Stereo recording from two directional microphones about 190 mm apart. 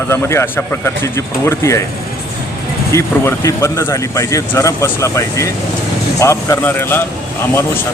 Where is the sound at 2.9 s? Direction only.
15° left (ahead or behind).